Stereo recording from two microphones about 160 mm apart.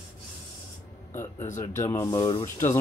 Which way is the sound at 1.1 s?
15° left (ahead or behind).